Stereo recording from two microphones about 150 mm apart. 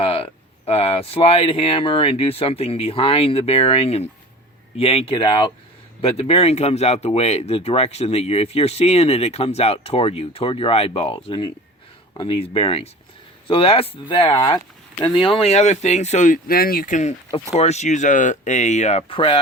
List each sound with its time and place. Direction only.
0.0 s speech: 40° left (ahead or behind)
17.3 s speech: 45° left (ahead or behind)